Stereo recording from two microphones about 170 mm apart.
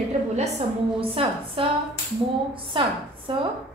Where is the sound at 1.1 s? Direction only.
35° right (ahead or behind).